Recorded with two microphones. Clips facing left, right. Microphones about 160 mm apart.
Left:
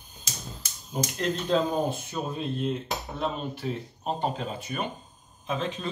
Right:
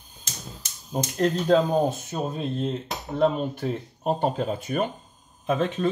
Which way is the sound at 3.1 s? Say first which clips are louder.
Right 11 dB; 45° right (ahead or behind).